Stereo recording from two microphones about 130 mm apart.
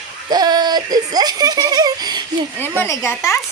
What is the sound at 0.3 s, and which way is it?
Speech, 30° right (ahead or behind).